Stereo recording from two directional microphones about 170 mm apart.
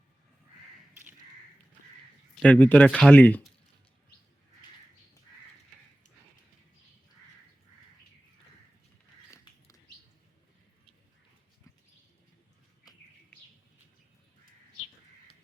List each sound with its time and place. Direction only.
2.3 s speech: 5° left (ahead or behind)
9.3 s bird: 20° left (ahead or behind)